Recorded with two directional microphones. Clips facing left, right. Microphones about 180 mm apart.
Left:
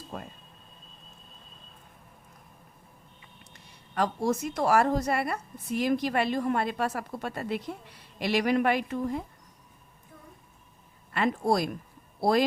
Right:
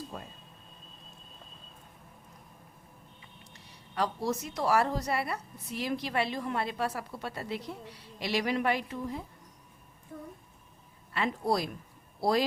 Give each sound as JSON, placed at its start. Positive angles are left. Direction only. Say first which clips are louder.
{"t": 0.1, "sound": "speech", "louder": "left 3 dB", "side_deg": 60}
{"t": 3.9, "sound": "a woman's voice", "louder": "left 4 dB", "side_deg": 50}
{"t": 11.1, "sound": "speech", "louder": "left 4 dB", "side_deg": 55}